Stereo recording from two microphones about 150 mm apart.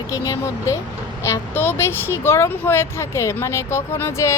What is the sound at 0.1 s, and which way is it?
Speech, 20° left (ahead or behind).